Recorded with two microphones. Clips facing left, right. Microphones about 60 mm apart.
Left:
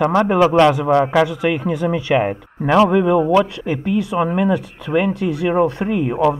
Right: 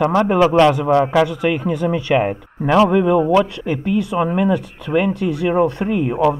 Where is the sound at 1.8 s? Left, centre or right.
Left.